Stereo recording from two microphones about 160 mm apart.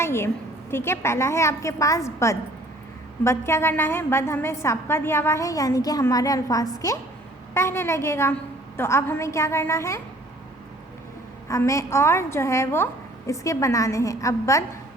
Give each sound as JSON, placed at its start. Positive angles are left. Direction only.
{"t": 0.0, "sound": "a woman's voice", "side_deg": 15}
{"t": 11.4, "sound": "a woman's voice", "side_deg": 20}